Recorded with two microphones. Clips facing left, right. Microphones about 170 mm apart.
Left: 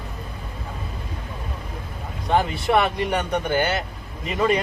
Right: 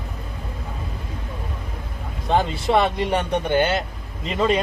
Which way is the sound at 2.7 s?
30° right (ahead or behind).